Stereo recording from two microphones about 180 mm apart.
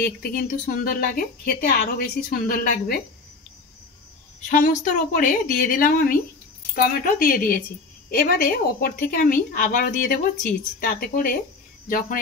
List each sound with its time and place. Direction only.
0.2 s a woman's voice: 55° left (ahead or behind)
4.5 s a woman's voice: 50° left (ahead or behind)